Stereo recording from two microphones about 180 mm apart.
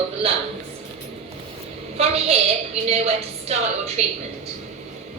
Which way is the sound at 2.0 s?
35° right (ahead or behind).